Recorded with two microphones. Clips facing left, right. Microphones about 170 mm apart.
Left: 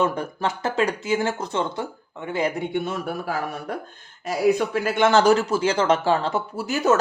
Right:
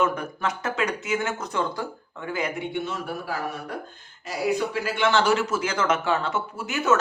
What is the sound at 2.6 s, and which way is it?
Speech, 50° left (ahead or behind).